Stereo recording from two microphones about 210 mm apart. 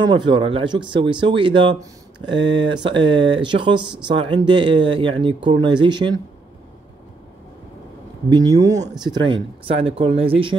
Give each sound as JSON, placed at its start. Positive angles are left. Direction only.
{"t": 0.1, "sound": "speech", "side_deg": -25}
{"t": 8.5, "sound": "speech", "side_deg": -15}